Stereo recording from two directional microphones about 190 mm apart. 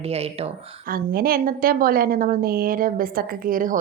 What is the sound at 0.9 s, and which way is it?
A woman's voice, 50° right (ahead or behind).